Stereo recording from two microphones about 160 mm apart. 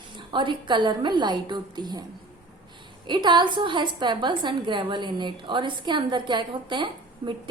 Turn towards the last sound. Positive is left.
turn(degrees=-30)  # may be behind; listen again after turning